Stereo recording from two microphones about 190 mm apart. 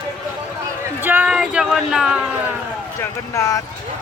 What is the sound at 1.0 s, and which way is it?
A man's voice, 10° right (ahead or behind).